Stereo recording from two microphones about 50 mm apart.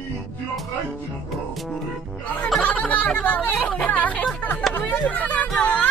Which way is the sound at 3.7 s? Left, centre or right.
Left.